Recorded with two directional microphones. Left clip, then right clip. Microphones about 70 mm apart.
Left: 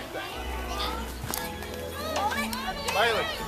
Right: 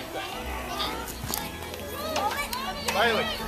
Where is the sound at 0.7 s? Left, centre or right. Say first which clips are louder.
Right 1 dB; centre.